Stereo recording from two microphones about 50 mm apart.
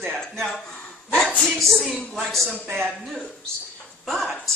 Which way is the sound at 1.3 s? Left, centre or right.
Centre.